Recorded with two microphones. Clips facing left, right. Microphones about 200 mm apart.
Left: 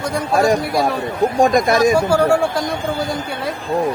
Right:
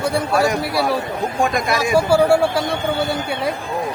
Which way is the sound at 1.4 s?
40° left (ahead or behind).